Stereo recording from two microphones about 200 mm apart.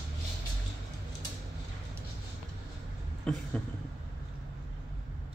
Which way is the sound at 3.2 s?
5° left (ahead or behind).